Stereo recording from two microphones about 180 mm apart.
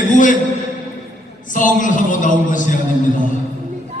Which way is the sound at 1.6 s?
45° left (ahead or behind).